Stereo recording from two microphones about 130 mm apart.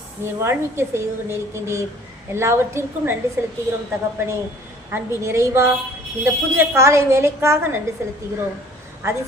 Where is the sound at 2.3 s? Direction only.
20° right (ahead or behind).